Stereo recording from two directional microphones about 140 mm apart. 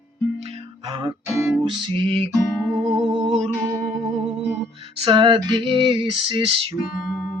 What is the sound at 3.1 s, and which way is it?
Music, 55° right (ahead or behind).